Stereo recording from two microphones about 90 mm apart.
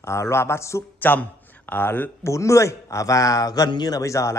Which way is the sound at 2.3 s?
35° left (ahead or behind).